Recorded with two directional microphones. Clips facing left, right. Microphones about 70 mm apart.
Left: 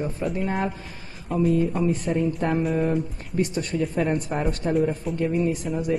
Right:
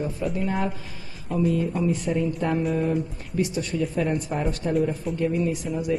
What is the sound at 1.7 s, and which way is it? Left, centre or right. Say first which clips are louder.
A woman's voice: left 1 dB; left.